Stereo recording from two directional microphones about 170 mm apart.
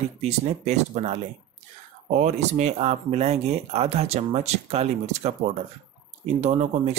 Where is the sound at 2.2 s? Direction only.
40° right (ahead or behind).